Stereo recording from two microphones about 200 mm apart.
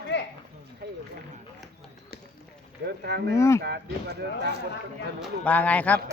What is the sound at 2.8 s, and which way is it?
Speech, 55° right (ahead or behind).